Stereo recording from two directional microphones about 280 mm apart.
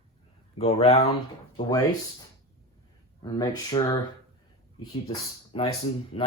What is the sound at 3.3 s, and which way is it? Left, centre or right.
Speech, centre.